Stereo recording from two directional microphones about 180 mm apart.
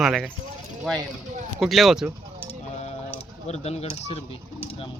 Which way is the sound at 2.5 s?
35° left (ahead or behind).